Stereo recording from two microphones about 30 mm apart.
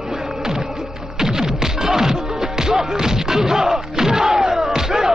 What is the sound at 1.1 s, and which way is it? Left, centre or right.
Music, centre.